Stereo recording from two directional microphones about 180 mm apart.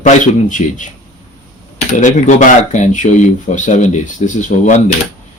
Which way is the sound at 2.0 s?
40° left (ahead or behind).